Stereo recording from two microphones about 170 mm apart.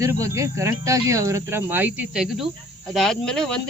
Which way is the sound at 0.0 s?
20° right (ahead or behind).